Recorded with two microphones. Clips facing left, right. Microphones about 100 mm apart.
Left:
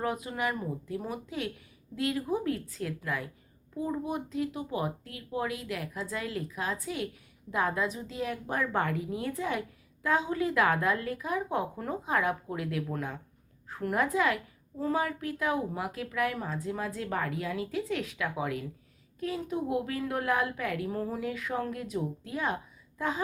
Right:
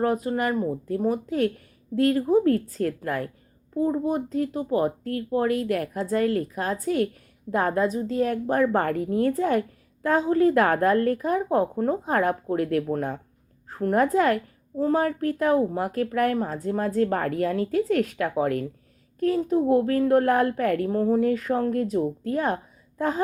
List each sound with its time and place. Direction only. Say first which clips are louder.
0.0 s a child's voice: right 8 dB; 40° right (ahead or behind)
3.8 s a child's voice: right 9 dB; 40° right (ahead or behind)